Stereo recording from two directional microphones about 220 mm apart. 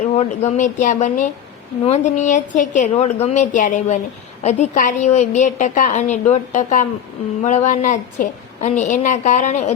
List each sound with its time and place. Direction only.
0.2 s a woman's voice: 30° left (ahead or behind)